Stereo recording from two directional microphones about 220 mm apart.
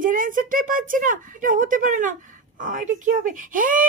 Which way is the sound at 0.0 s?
40° right (ahead or behind).